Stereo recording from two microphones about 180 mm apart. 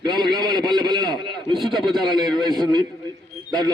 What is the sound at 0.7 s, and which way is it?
Speech, 25° right (ahead or behind).